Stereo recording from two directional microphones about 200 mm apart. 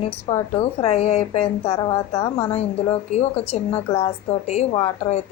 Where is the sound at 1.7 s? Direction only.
15° left (ahead or behind).